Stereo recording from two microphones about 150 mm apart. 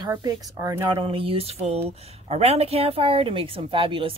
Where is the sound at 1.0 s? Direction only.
35° right (ahead or behind).